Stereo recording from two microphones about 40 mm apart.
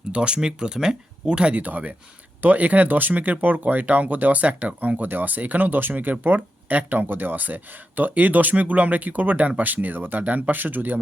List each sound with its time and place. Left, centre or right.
0.1 s speech: right
1.5 s speech: right